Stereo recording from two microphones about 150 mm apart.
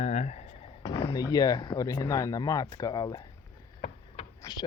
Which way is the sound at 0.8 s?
30° left (ahead or behind).